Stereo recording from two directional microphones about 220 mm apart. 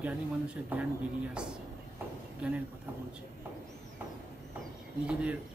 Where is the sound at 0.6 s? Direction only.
5° right (ahead or behind).